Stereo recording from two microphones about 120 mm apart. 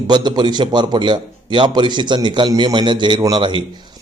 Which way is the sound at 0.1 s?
40° right (ahead or behind).